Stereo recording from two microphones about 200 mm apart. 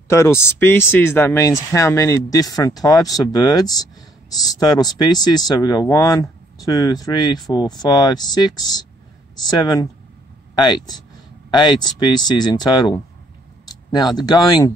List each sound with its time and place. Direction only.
0.1 s speech: 15° left (ahead or behind)